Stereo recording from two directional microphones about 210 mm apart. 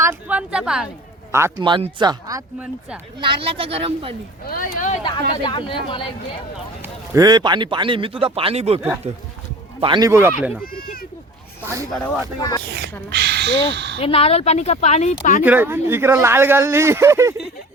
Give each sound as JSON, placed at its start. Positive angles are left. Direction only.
{"t": 0.0, "sound": "a man's voice", "side_deg": -10}
{"t": 4.4, "sound": "speech", "side_deg": 45}
{"t": 5.4, "sound": "speech", "side_deg": 20}
{"t": 6.8, "sound": "a man's voice", "side_deg": -15}
{"t": 10.6, "sound": "speech", "side_deg": 45}
{"t": 11.6, "sound": "speech", "side_deg": -15}
{"t": 12.4, "sound": "speech", "side_deg": 15}
{"t": 13.1, "sound": "speech", "side_deg": -50}
{"t": 14.0, "sound": "speech", "side_deg": 25}
{"t": 15.4, "sound": "speech", "side_deg": -10}